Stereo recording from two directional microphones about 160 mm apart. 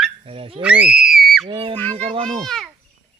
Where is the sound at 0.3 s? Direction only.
35° right (ahead or behind).